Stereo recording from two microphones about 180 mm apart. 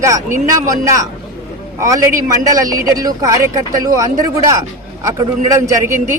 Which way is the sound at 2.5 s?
20° right (ahead or behind).